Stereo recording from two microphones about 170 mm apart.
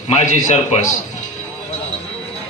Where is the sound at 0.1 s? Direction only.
45° left (ahead or behind).